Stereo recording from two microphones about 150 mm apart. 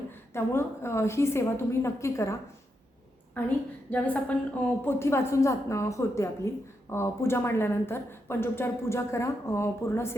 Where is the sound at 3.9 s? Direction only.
10° left (ahead or behind).